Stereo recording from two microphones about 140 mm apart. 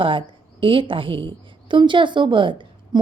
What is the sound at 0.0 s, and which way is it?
A woman's voice, 40° right (ahead or behind).